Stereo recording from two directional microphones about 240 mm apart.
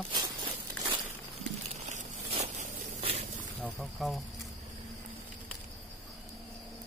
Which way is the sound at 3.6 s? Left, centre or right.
Centre.